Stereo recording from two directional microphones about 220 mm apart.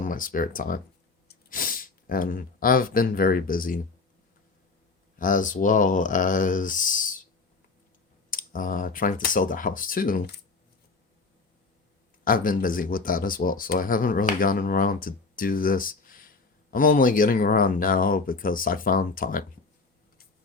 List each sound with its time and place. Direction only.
0.0 s speech: 35° left (ahead or behind)
5.1 s speech: 35° left (ahead or behind)
8.3 s speech: 40° left (ahead or behind)
12.2 s speech: 40° left (ahead or behind)